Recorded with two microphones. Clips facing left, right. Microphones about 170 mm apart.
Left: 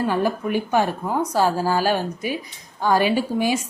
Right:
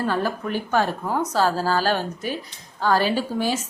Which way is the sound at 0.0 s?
15° left (ahead or behind).